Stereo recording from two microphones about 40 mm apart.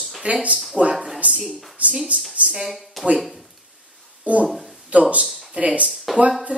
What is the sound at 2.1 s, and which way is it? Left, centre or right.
Speech, right.